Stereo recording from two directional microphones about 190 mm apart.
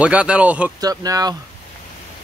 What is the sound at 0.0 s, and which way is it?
Speech, 5° right (ahead or behind).